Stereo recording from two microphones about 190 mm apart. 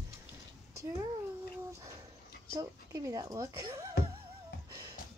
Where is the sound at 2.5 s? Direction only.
20° right (ahead or behind).